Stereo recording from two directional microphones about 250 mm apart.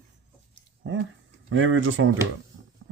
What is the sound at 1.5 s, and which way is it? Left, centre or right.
Speech, right.